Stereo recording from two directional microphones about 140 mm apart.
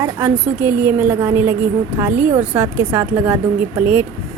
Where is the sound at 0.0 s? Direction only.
15° right (ahead or behind).